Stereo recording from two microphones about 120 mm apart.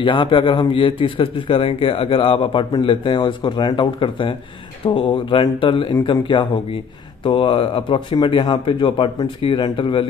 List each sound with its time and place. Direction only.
0.0 s a man's voice: 45° left (ahead or behind)